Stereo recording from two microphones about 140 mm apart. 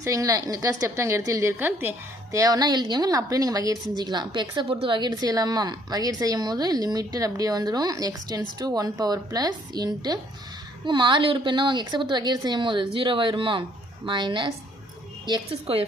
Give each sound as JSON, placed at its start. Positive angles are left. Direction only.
{"t": 0.0, "sound": "a woman's voice", "side_deg": -25}